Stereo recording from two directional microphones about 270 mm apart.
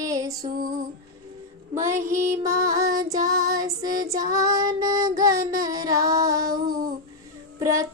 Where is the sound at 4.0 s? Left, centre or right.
Centre.